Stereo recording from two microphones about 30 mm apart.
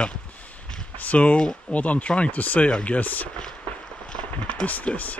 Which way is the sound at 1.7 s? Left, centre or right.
Left.